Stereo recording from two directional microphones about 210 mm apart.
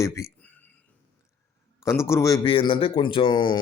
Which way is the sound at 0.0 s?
15° left (ahead or behind).